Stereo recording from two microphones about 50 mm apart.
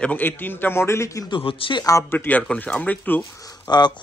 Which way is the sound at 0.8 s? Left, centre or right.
Left.